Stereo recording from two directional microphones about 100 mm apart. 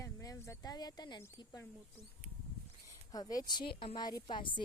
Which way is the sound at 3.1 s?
40° left (ahead or behind).